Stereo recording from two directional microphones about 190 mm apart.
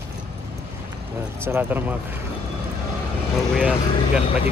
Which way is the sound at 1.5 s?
10° right (ahead or behind).